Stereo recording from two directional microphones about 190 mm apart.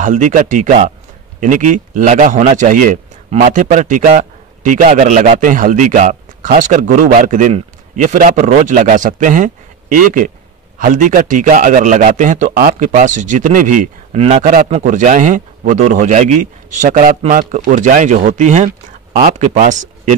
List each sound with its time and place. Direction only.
0.0 s a man's voice: 40° right (ahead or behind)
14.4 s speech: 50° right (ahead or behind)
14.7 s speech: 40° right (ahead or behind)